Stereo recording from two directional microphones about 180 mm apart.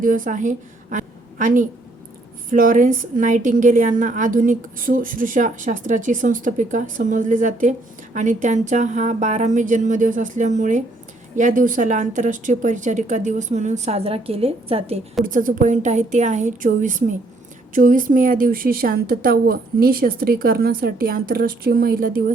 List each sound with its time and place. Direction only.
0.0 s a woman's voice: 45° right (ahead or behind)
15.2 s a woman's voice: 50° right (ahead or behind)